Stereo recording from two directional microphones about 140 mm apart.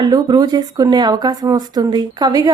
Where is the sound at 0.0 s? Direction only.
30° right (ahead or behind).